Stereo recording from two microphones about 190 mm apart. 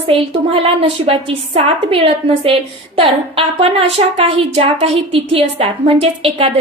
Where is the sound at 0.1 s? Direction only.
30° right (ahead or behind).